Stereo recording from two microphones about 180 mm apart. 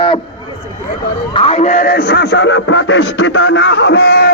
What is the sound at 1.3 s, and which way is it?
A man's voice, 30° left (ahead or behind).